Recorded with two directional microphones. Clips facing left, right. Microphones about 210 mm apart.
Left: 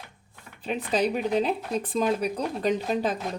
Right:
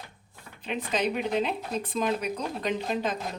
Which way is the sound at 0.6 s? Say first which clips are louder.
Left 3 dB; 35° left (ahead or behind).